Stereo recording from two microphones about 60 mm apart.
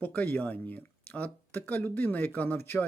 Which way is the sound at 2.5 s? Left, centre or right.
Left.